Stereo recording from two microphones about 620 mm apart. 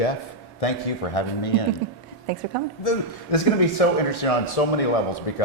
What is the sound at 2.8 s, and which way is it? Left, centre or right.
A man's voice, left.